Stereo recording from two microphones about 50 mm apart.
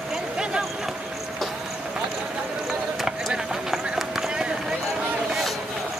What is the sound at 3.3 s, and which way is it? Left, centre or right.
Run, centre.